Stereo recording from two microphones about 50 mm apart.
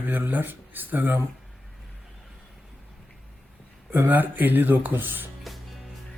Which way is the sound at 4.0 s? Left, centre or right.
Right.